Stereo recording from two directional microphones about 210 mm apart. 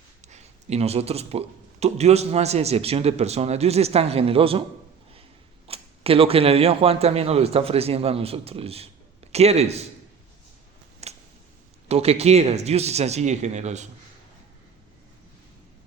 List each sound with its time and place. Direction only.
0.3 s speech: 30° right (ahead or behind)
5.6 s speech: 25° right (ahead or behind)
11.0 s a sound: 30° right (ahead or behind)
11.9 s speech: 30° right (ahead or behind)